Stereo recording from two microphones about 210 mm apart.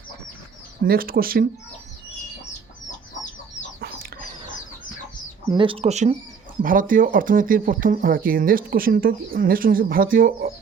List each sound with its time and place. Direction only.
0.9 s speech: 45° right (ahead or behind)
3.8 s chicken: 45° right (ahead or behind)
5.5 s speech: 25° right (ahead or behind); by 10.5 s 40° right (ahead or behind)